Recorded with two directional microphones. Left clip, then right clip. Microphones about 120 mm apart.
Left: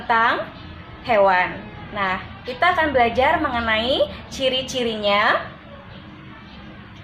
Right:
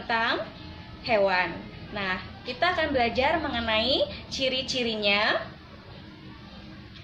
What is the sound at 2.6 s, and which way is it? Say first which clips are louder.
A woman's voice: left 7 dB; 20° right (ahead or behind).